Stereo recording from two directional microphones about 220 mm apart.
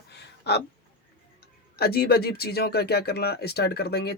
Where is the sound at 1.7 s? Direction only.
45° left (ahead or behind).